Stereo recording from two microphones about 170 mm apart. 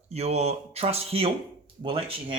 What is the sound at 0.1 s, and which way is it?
Speech, 40° right (ahead or behind).